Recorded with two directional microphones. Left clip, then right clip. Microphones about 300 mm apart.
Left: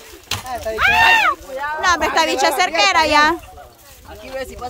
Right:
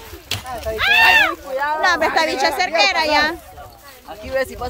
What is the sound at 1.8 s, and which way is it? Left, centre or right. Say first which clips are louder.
Speech: left 2 dB; centre.